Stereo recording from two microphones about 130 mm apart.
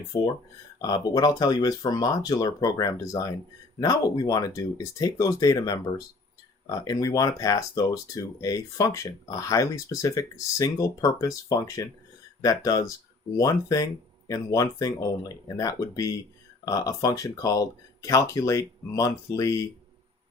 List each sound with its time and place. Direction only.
0.1 s speech: 25° left (ahead or behind)